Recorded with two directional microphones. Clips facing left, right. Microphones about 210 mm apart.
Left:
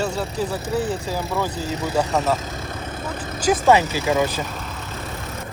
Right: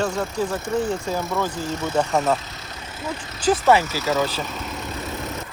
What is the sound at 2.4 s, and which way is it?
Vehicle, 50° left (ahead or behind).